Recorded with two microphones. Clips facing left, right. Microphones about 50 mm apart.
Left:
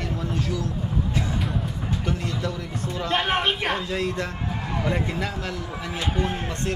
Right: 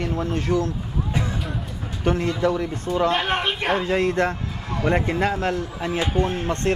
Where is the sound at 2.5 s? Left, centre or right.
Right.